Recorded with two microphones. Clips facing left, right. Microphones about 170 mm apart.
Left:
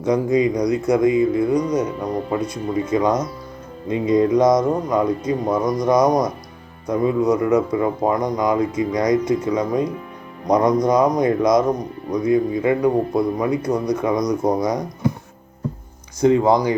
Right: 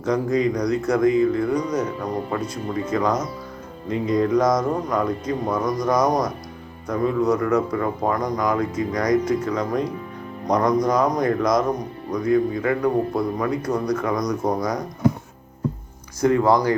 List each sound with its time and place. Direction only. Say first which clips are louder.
0.0 s a man's voice: left 3 dB; 15° left (ahead or behind)
16.2 s a man's voice: left 2 dB; 20° left (ahead or behind)